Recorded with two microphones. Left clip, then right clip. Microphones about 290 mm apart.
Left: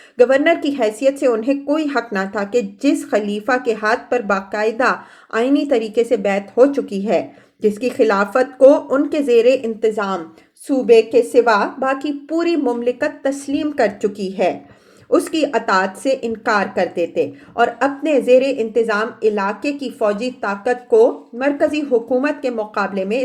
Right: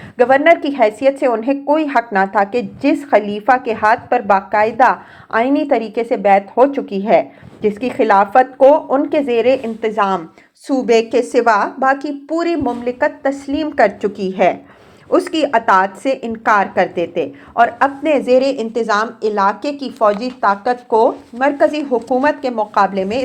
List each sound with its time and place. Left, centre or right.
0.2 s a woman's voice: centre